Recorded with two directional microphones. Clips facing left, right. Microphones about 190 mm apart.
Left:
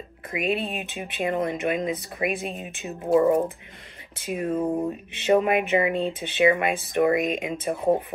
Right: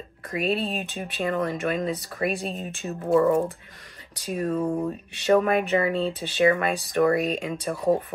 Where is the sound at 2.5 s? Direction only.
15° left (ahead or behind).